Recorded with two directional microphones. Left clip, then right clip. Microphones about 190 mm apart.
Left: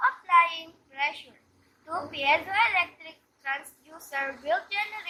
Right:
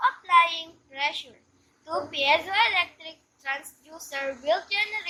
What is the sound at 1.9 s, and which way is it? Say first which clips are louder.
A woman's voice: right 2 dB; 45° right (ahead or behind).